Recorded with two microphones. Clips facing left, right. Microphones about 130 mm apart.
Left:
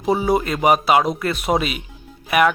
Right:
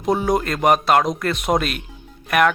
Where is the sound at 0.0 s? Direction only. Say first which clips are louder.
Left 1 dB; 5° left (ahead or behind).